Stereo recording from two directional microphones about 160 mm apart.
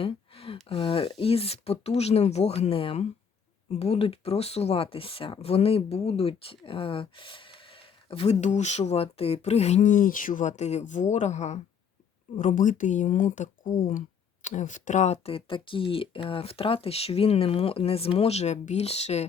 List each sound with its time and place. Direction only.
0.0 s speech: 35° left (ahead or behind)